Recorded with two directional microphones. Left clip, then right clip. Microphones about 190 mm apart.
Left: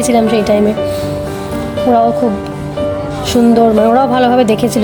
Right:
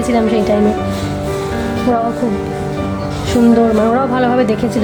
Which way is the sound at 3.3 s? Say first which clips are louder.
Left 2 dB; 20° left (ahead or behind).